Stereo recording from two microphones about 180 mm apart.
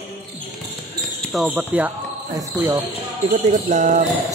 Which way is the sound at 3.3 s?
40° right (ahead or behind).